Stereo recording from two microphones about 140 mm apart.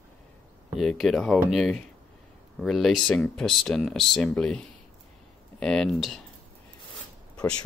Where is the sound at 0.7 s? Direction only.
Centre (ahead or behind).